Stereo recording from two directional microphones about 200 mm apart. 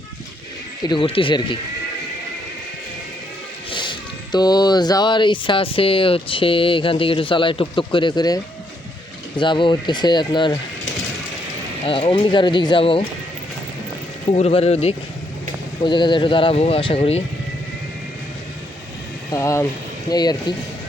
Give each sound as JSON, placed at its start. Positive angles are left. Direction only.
{"t": 0.9, "sound": "speech", "side_deg": 25}
{"t": 3.7, "sound": "speech", "side_deg": 25}
{"t": 9.4, "sound": "speech", "side_deg": 25}
{"t": 11.9, "sound": "speech", "side_deg": 25}
{"t": 14.3, "sound": "speech", "side_deg": 30}
{"t": 19.3, "sound": "speech", "side_deg": 15}